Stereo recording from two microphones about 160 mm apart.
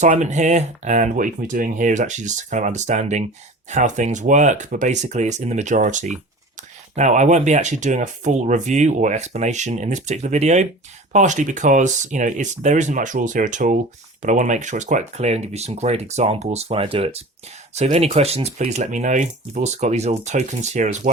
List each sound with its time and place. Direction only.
0.0 s speech: 50° right (ahead or behind)